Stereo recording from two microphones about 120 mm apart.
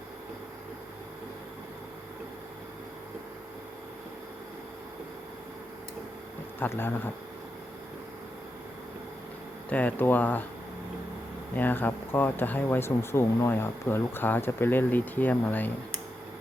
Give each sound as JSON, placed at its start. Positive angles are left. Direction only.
{"t": 6.6, "sound": "speech", "side_deg": 20}
{"t": 9.6, "sound": "speech", "side_deg": 10}
{"t": 11.5, "sound": "speech", "side_deg": 15}